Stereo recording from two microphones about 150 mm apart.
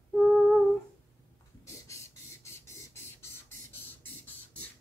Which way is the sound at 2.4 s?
15° left (ahead or behind).